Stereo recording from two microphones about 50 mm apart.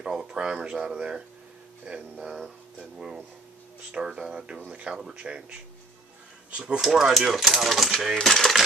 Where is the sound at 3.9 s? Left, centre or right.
Centre.